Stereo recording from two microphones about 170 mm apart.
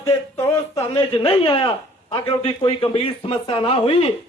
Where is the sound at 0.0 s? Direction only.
20° left (ahead or behind).